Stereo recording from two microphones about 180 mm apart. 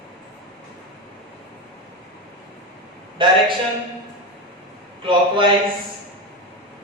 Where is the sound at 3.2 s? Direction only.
25° right (ahead or behind).